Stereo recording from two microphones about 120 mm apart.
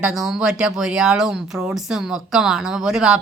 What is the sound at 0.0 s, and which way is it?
Speech, 5° right (ahead or behind).